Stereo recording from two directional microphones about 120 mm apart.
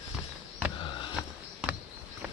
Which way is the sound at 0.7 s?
45° left (ahead or behind).